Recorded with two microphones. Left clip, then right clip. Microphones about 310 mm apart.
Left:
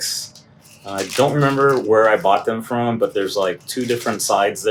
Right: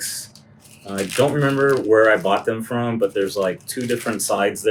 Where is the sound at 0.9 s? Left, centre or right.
Centre.